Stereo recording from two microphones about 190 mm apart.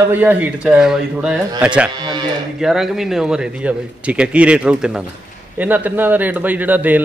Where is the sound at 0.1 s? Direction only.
10° right (ahead or behind).